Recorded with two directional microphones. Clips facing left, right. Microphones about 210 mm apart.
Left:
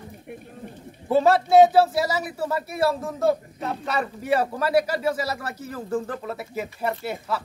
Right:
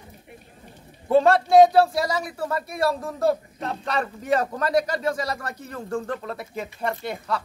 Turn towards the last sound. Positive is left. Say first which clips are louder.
# even
turn(degrees=5)  # may be behind; listen again after turning